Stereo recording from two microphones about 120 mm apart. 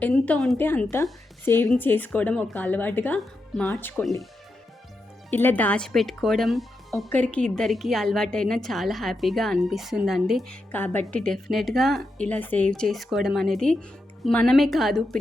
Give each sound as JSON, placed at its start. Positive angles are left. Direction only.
{"t": 0.0, "sound": "a woman's voice", "side_deg": 10}
{"t": 3.2, "sound": "a woman's voice", "side_deg": 5}
{"t": 5.3, "sound": "a woman's voice", "side_deg": 15}
{"t": 7.1, "sound": "a woman's voice", "side_deg": 10}
{"t": 10.7, "sound": "a woman's voice", "side_deg": 15}